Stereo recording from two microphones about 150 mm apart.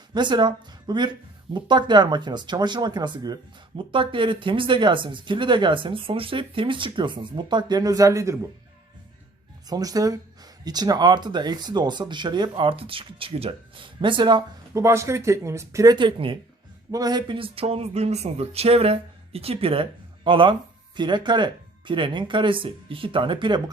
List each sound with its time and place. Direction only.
0.1 s speech: 30° right (ahead or behind)
9.6 s speech: 25° right (ahead or behind)